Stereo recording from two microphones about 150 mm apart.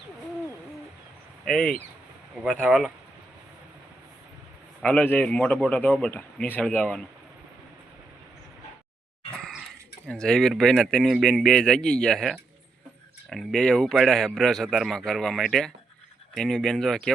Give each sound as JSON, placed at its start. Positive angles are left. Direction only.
{"t": 1.5, "sound": "a man's voice", "side_deg": 5}
{"t": 2.4, "sound": "a man's voice", "side_deg": -5}
{"t": 4.8, "sound": "a man's voice", "side_deg": 10}
{"t": 9.4, "sound": "dog", "side_deg": -5}
{"t": 10.1, "sound": "a man's voice", "side_deg": 5}